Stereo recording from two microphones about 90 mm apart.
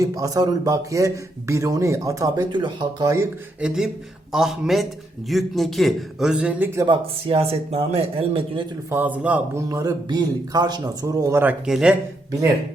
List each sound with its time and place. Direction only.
0.0 s speech: 40° right (ahead or behind)
2.5 s speech: 60° right (ahead or behind)
3.6 s a man's voice: 5° right (ahead or behind)
6.8 s a man's voice: 90° right
8.9 s a man's voice: 20° right (ahead or behind)
9.6 s speech: 40° right (ahead or behind)
10.1 s speech: 50° right (ahead or behind)
11.3 s speech: 25° right (ahead or behind)
11.6 s a man's voice: 5° right (ahead or behind)